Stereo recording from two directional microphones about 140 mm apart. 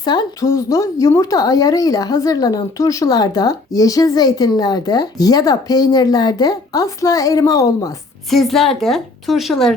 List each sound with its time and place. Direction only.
0.0 s speech: 30° left (ahead or behind)
8.3 s a woman's voice: centre (ahead or behind)